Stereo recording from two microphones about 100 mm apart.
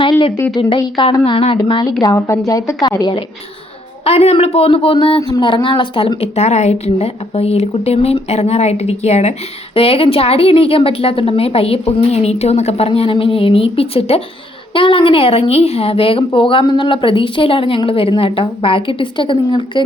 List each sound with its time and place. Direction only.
0.8 s a woman's voice: 60° left (ahead or behind)
1.8 s a woman's voice: 35° left (ahead or behind)
4.0 s a woman's voice: 90° left
9.7 s a woman's voice: 70° left (ahead or behind)
14.7 s a woman's voice: 60° left (ahead or behind)